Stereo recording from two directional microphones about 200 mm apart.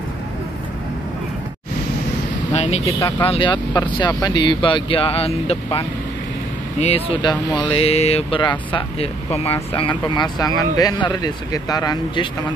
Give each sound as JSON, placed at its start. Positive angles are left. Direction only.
{"t": 2.5, "sound": "speech", "side_deg": 35}
{"t": 3.0, "sound": "speech", "side_deg": 15}
{"t": 3.3, "sound": "speech", "side_deg": 25}